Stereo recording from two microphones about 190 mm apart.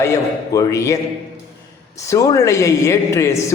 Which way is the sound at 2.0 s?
15° left (ahead or behind).